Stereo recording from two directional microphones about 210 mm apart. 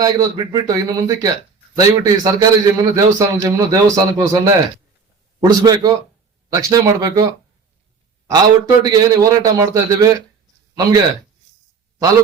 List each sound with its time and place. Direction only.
0.0 s a man's voice: 20° right (ahead or behind)
8.3 s a man's voice: 20° right (ahead or behind)